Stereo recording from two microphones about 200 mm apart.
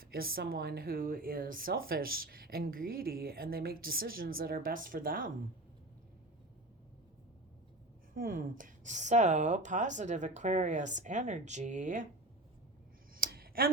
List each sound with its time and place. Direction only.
0.0 s speech: 45° right (ahead or behind)
8.1 s a woman's voice: 45° right (ahead or behind)
13.1 s a sound: 45° right (ahead or behind)